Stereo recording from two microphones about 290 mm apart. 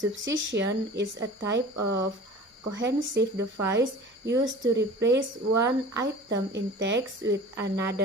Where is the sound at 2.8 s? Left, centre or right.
Right.